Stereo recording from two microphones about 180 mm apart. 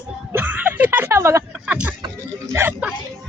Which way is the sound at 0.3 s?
10° right (ahead or behind).